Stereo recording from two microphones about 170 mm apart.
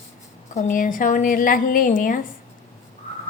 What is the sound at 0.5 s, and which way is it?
A woman's voice, 50° left (ahead or behind).